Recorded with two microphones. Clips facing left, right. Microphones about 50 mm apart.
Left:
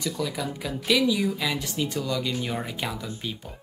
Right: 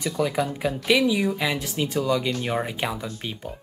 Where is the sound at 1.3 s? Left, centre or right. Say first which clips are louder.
Right 3 dB; centre.